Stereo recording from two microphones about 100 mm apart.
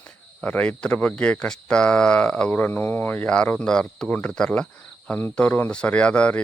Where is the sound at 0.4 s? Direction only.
15° left (ahead or behind).